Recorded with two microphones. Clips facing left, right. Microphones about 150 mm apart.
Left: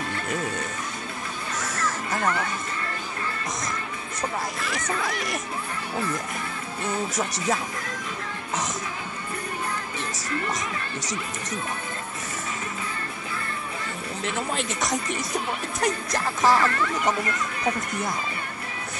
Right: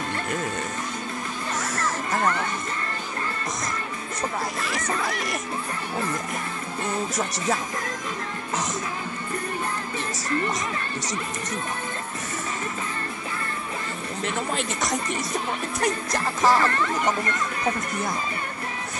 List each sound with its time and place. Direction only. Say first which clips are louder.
0.3 s speech: left 1 dB; centre (ahead or behind)
1.6 s a sound: even; centre (ahead or behind)
3.6 s music: right 1 dB; centre (ahead or behind)
5.0 s speech: right 1 dB; centre (ahead or behind)
6.8 s speech: even; centre (ahead or behind)
14.2 s speech: right 1 dB; centre (ahead or behind)
16.6 s speech: right 1 dB; 30° right (ahead or behind)
16.9 s speech: right 1 dB; centre (ahead or behind)